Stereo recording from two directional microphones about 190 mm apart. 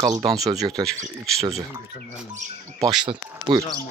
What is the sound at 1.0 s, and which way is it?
Speech, 35° right (ahead or behind).